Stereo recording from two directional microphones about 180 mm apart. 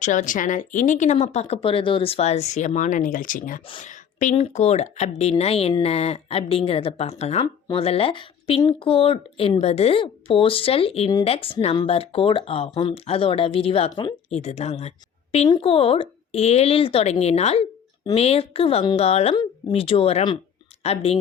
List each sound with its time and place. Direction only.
0.0 s speech: 45° left (ahead or behind)